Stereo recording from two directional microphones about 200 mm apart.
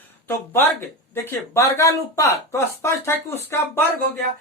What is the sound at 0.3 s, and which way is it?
Speech, 10° left (ahead or behind).